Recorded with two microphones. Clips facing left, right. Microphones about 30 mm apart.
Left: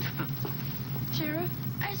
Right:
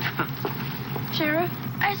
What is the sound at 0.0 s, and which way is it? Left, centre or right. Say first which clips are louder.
Speech: right 8 dB; right.